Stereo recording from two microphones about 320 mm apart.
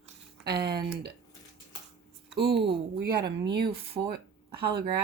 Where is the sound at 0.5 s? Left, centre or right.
Right.